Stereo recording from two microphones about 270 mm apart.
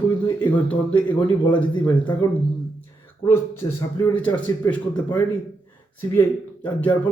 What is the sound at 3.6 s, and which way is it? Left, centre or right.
Speech, centre.